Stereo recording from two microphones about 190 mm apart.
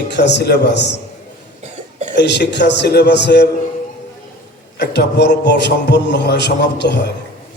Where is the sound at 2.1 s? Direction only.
65° left (ahead or behind).